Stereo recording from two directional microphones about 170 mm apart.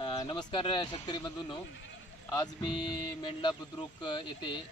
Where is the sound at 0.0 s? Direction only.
25° left (ahead or behind).